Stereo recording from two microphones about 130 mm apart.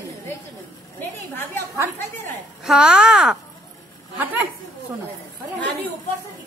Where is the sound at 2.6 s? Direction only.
5° right (ahead or behind).